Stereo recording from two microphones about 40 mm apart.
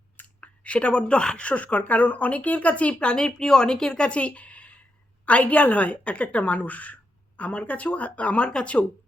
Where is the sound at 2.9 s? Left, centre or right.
Left.